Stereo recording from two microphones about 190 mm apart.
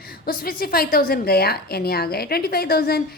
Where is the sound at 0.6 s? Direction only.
50° left (ahead or behind).